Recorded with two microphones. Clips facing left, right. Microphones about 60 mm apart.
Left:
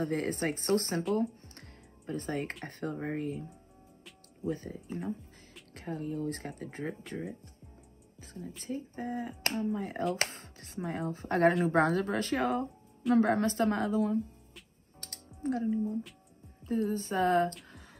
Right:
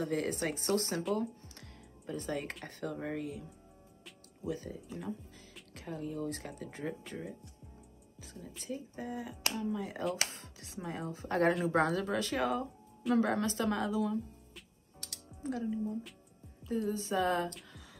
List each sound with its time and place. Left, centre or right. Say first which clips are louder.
0.0 s speech: left 2 dB; left
1.2 s music: left 5 dB; left
2.6 s speech: left 3 dB; left
4.5 s speech: left 3 dB; left
8.2 s a woman's voice: left 4 dB; left
15.0 s music: left 3 dB; left
16.6 s speech: left 3 dB; left